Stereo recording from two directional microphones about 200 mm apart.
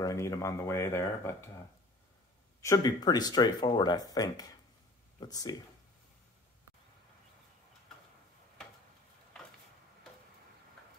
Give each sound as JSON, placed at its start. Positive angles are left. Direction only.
{"t": 0.0, "sound": "speech", "side_deg": 15}
{"t": 2.6, "sound": "speech", "side_deg": 20}